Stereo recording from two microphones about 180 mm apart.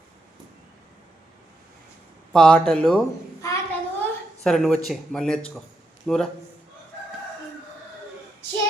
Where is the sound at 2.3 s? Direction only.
5° left (ahead or behind).